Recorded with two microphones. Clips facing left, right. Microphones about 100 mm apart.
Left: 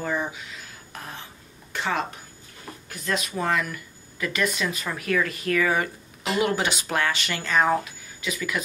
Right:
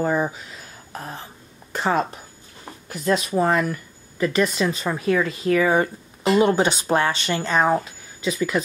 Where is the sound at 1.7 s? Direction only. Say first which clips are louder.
Right 5 dB; 40° right (ahead or behind).